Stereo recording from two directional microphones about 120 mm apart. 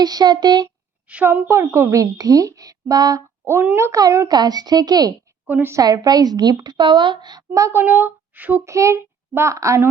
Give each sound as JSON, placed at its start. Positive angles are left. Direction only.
{"t": 0.0, "sound": "a woman's voice", "side_deg": -35}
{"t": 1.0, "sound": "a woman's voice", "side_deg": -15}
{"t": 3.4, "sound": "a woman's voice", "side_deg": -15}
{"t": 5.5, "sound": "a woman's voice", "side_deg": -15}
{"t": 5.7, "sound": "a woman's voice", "side_deg": -30}
{"t": 8.7, "sound": "a child's voice", "side_deg": -25}